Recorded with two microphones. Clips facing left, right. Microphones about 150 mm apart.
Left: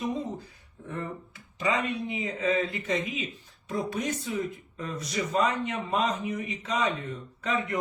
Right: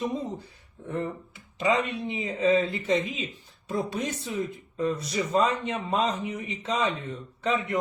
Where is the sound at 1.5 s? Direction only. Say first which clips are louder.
Right 3 dB; 25° right (ahead or behind).